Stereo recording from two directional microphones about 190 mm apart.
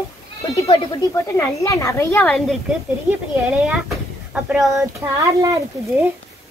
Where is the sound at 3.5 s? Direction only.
5° right (ahead or behind).